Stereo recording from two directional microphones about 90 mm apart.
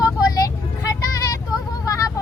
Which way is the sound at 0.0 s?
40° left (ahead or behind).